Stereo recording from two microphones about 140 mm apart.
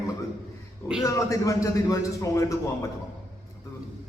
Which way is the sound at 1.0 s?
20° left (ahead or behind).